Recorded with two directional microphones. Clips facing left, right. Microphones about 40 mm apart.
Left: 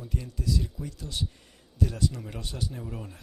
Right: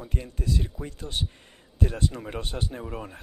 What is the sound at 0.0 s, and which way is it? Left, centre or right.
Speech, right.